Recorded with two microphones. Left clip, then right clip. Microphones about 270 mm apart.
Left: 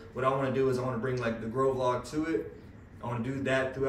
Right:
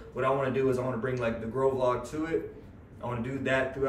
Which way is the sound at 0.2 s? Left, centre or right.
Centre.